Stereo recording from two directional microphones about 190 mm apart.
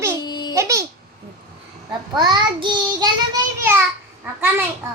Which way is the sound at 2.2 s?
20° right (ahead or behind).